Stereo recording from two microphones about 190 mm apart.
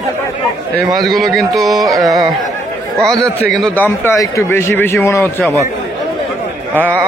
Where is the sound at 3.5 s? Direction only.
Centre (ahead or behind).